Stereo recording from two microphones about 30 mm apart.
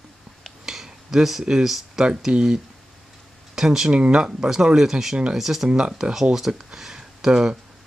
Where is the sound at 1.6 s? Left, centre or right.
Centre.